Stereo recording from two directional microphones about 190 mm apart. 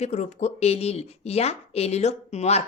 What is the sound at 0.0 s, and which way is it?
Speech, 35° left (ahead or behind).